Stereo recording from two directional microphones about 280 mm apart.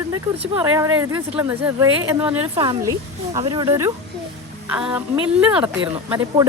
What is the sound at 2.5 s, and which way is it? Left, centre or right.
Speech, centre.